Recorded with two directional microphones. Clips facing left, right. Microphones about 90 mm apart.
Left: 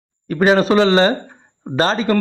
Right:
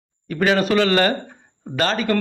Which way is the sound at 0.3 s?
30° left (ahead or behind).